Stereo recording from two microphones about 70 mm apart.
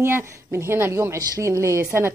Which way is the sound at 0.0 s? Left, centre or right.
Right.